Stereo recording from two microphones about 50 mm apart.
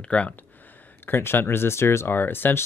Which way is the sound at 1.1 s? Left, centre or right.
Left.